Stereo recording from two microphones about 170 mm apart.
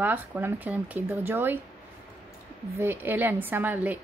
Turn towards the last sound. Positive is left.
turn(degrees=-10)  # may be behind; listen again after turning